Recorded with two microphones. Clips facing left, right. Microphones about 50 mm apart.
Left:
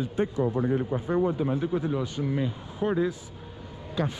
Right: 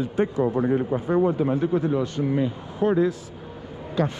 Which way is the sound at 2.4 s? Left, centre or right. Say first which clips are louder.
Right 5 dB; right.